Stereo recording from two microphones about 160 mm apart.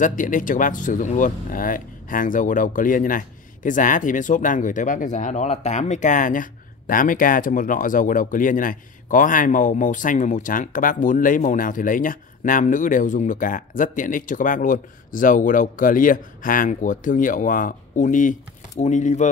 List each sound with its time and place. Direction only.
0.0 s speech: 55° left (ahead or behind)